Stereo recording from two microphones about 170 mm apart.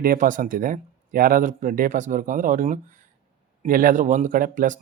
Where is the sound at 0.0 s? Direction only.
50° right (ahead or behind).